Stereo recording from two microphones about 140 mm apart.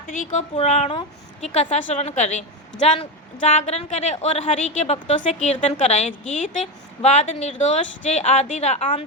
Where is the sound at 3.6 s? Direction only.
50° left (ahead or behind).